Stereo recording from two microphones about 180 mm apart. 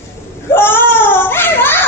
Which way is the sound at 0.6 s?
10° left (ahead or behind).